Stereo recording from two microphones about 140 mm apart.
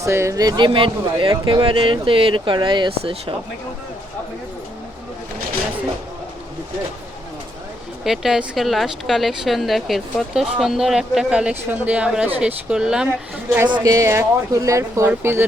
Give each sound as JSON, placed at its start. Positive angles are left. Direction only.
{"t": 0.0, "sound": "speech", "side_deg": -20}
{"t": 8.0, "sound": "speech", "side_deg": 0}
{"t": 13.7, "sound": "speech", "side_deg": -30}